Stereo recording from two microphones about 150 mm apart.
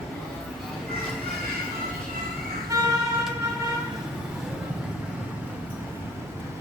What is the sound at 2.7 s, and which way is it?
Vehicle, 25° right (ahead or behind).